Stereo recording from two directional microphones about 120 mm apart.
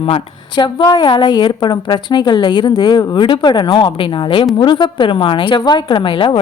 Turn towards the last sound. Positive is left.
turn(degrees=45)  # may be behind; listen again after turning